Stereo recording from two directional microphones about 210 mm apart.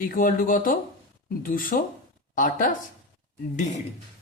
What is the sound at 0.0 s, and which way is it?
Speech, 40° left (ahead or behind).